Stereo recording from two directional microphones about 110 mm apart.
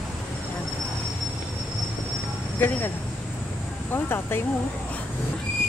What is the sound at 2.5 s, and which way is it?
Speech, 20° left (ahead or behind).